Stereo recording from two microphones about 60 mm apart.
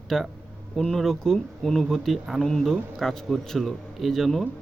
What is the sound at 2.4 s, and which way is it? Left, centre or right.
Speech, centre.